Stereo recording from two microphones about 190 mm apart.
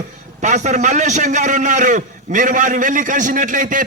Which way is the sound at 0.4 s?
40° right (ahead or behind).